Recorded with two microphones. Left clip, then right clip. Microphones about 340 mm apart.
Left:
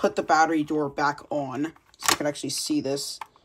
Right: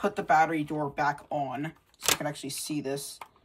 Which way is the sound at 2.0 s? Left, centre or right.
Centre.